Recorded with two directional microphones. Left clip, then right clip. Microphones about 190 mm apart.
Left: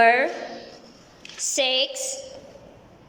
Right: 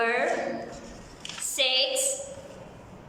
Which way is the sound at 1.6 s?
40° left (ahead or behind).